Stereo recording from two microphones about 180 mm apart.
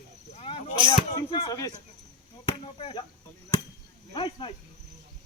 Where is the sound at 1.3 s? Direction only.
20° left (ahead or behind).